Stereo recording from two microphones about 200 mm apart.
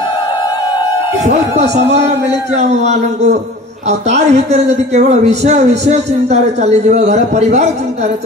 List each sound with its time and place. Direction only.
2.5 s a man's voice: 35° right (ahead or behind)